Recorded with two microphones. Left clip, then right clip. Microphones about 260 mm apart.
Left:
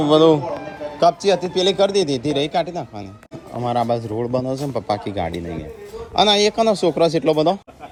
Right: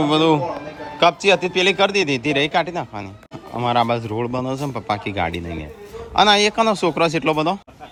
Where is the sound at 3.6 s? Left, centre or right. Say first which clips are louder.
Right 2 dB; centre.